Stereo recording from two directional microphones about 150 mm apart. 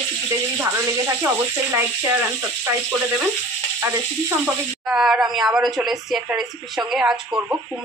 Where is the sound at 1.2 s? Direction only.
15° right (ahead or behind).